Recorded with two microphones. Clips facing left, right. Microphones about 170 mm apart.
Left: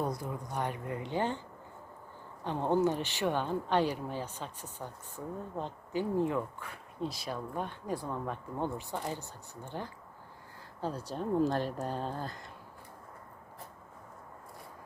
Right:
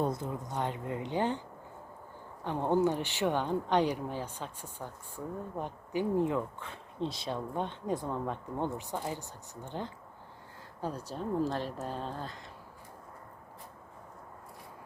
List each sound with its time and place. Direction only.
0.0 s speech: 25° right (ahead or behind)
2.5 s speech: 15° right (ahead or behind)
11.2 s speech: centre (ahead or behind)